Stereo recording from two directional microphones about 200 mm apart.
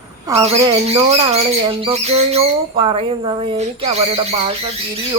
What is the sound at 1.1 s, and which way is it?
Speech, 30° right (ahead or behind).